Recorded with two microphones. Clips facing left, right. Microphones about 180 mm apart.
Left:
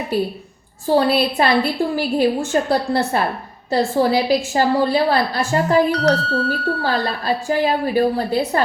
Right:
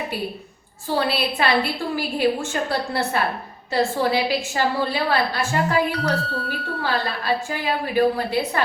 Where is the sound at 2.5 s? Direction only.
35° left (ahead or behind).